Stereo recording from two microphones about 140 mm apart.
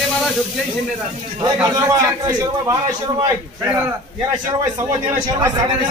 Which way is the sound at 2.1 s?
25° right (ahead or behind).